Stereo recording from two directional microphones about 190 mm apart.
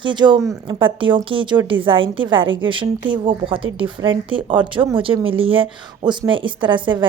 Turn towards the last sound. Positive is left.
turn(degrees=-25)  # may be behind; listen again after turning